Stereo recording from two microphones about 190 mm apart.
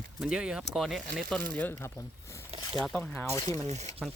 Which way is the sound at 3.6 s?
35° right (ahead or behind).